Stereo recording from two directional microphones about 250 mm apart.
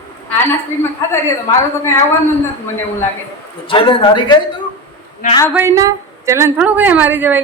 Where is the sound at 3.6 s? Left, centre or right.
Left.